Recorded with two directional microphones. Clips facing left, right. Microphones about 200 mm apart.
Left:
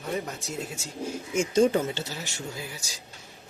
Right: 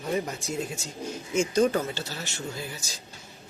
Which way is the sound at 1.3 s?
20° left (ahead or behind).